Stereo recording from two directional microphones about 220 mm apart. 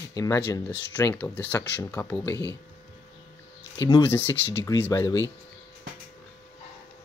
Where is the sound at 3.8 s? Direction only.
15° left (ahead or behind).